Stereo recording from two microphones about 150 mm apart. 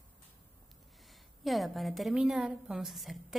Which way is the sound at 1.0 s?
Centre (ahead or behind).